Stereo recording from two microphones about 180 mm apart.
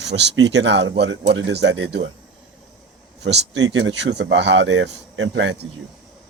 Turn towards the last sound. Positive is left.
turn(degrees=-90)